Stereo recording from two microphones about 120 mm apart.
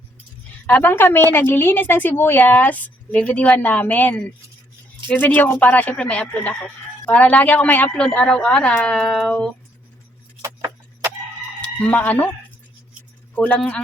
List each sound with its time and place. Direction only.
0.7 s a woman's voice: 15° left (ahead or behind)
10.4 s keys jangling: 25° right (ahead or behind)
11.6 s speech: 10° left (ahead or behind)
13.3 s a woman's voice: 10° left (ahead or behind)